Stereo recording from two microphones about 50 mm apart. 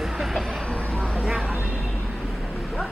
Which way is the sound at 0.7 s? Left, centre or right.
Left.